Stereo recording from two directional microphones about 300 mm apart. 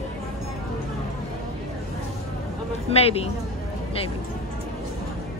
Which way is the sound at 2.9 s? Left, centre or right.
Centre.